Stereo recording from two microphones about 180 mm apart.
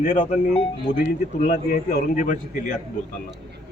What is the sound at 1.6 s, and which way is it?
Speech, 45° left (ahead or behind).